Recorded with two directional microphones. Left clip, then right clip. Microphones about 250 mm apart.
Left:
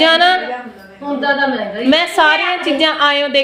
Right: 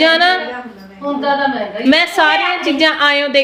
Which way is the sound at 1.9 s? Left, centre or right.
Centre.